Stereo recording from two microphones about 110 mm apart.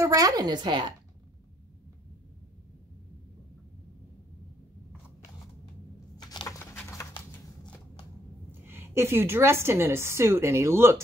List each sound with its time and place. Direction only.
0.0 s a woman's voice: 35° right (ahead or behind)
6.1 s a sound: 40° left (ahead or behind)
6.6 s dog: 25° left (ahead or behind)
8.5 s a woman's voice: 20° right (ahead or behind)